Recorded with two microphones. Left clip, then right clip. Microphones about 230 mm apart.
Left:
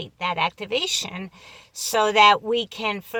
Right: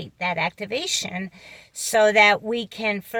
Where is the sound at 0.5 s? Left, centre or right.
Centre.